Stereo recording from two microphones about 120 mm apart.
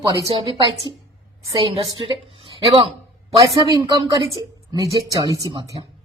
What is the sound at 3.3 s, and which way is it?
A woman's voice, 30° right (ahead or behind).